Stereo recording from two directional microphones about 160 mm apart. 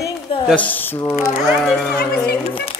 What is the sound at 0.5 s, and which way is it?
Speech, 10° left (ahead or behind).